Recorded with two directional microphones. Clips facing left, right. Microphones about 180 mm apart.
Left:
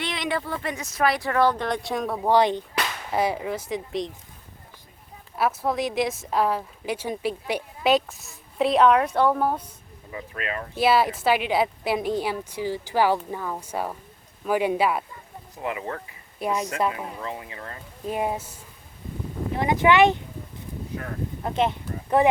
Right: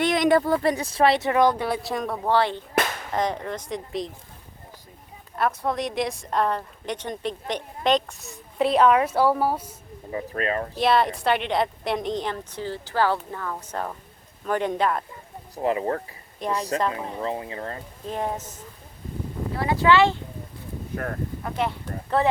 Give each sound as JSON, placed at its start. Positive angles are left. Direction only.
{"t": 0.0, "sound": "speech", "side_deg": -45}
{"t": 2.2, "sound": "a woman's voice", "side_deg": 15}
{"t": 5.4, "sound": "a woman's voice", "side_deg": 5}
{"t": 10.1, "sound": "speech", "side_deg": -40}
{"t": 10.8, "sound": "a woman's voice", "side_deg": 5}
{"t": 15.5, "sound": "speech", "side_deg": -35}
{"t": 16.4, "sound": "speech", "side_deg": 10}
{"t": 16.9, "sound": "speech", "side_deg": -30}
{"t": 18.0, "sound": "speech", "side_deg": 10}
{"t": 21.4, "sound": "speech", "side_deg": 20}